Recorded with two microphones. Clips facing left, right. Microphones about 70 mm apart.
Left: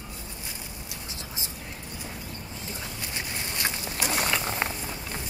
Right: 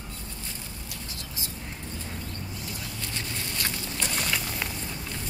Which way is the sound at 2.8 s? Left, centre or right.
Centre.